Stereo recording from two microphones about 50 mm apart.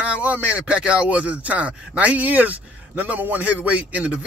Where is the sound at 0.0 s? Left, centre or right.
Right.